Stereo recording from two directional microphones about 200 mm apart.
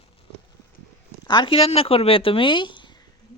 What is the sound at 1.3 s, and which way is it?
Speech, 25° left (ahead or behind).